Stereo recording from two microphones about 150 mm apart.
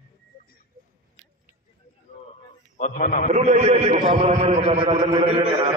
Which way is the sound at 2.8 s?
55° left (ahead or behind).